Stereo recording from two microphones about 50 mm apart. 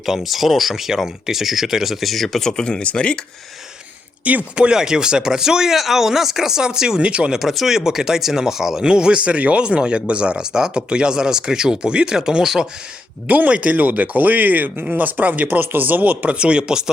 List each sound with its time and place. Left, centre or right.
0.0 s speech: centre; by 3.2 s left
4.2 s speech: right
4.5 s speech: centre
7.3 s speech: centre
13.2 s speech: right; by 16.9 s centre